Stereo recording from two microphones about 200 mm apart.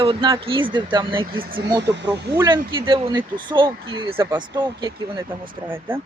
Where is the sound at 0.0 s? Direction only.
25° right (ahead or behind).